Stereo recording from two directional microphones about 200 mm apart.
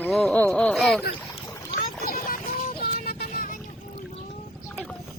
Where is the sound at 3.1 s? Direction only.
45° left (ahead or behind).